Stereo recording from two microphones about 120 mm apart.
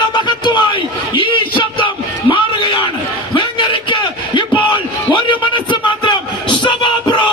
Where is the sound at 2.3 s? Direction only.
45° left (ahead or behind).